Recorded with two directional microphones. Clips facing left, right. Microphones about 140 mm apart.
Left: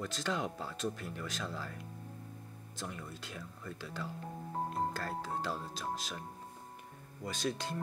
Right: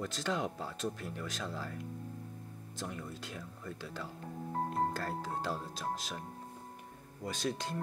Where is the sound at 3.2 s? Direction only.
35° right (ahead or behind).